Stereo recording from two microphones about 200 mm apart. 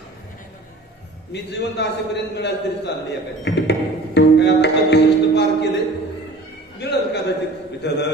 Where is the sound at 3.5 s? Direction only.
60° left (ahead or behind).